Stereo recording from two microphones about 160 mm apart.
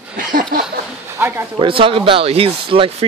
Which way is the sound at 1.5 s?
35° right (ahead or behind).